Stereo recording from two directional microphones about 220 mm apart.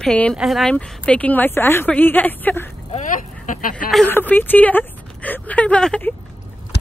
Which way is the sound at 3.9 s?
5° left (ahead or behind).